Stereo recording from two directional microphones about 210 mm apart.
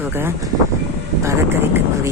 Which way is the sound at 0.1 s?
10° right (ahead or behind).